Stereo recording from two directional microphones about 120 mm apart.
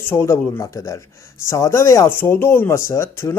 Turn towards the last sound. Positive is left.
turn(degrees=25)  # may be behind; listen again after turning